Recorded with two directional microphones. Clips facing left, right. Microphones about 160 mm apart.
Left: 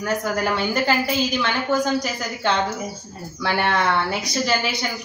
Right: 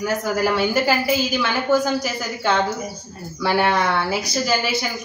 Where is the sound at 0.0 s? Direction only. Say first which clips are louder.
Right 2 dB; 5° right (ahead or behind).